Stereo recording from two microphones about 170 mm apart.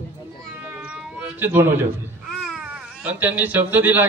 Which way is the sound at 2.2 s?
5° right (ahead or behind).